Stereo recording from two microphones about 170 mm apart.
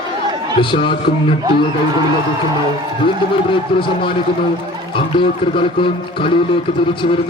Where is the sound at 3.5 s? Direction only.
30° left (ahead or behind).